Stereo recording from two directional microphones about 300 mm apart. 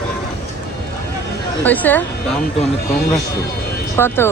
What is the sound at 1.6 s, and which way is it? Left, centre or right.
Speech, centre.